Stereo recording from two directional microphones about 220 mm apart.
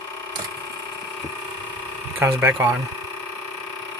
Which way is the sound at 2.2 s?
10° right (ahead or behind).